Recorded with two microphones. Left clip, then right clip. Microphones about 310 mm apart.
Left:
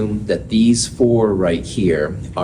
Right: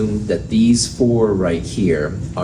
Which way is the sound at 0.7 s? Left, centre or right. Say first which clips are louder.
Left 2 dB; left.